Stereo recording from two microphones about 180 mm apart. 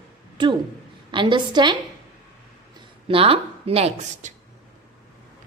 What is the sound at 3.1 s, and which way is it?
A woman's voice, 30° right (ahead or behind).